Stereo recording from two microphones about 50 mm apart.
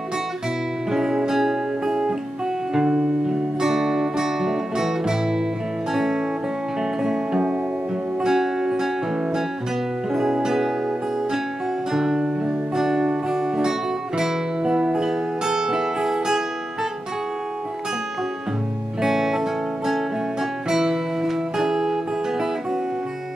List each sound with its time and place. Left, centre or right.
0.9 s music: centre
11.9 s music: centre
18.9 s music: centre
20.7 s music: centre